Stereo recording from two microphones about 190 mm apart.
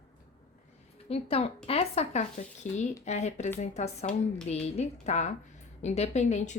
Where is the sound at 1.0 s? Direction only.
30° left (ahead or behind).